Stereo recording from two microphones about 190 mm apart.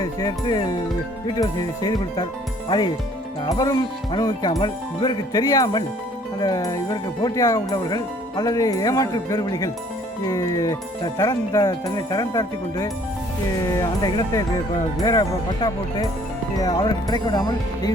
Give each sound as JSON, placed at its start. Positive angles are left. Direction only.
{"t": 0.0, "sound": "music", "side_deg": 20}
{"t": 1.4, "sound": "speech", "side_deg": 20}
{"t": 16.6, "sound": "speech", "side_deg": 20}